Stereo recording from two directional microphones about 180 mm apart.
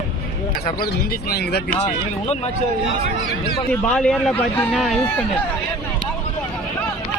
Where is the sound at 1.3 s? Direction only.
65° left (ahead or behind).